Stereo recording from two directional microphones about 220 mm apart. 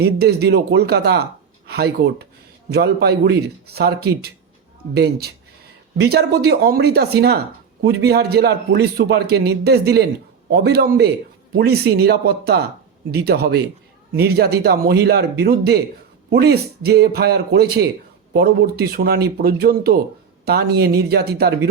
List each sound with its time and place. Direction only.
0.0 s speech: 45° right (ahead or behind)